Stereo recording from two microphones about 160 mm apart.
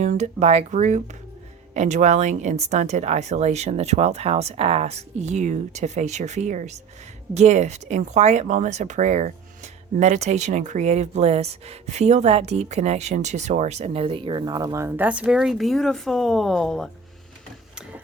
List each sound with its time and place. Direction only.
0.0 s speech: 50° right (ahead or behind); by 16.9 s centre (ahead or behind)